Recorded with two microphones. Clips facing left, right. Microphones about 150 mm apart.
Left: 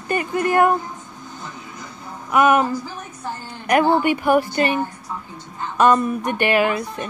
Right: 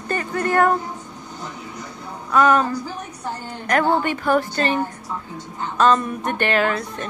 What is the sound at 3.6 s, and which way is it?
Speech, 10° left (ahead or behind).